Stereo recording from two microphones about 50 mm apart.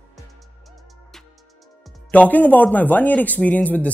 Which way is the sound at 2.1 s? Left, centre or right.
Left.